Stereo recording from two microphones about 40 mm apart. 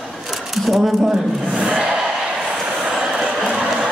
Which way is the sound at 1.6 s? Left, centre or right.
Right.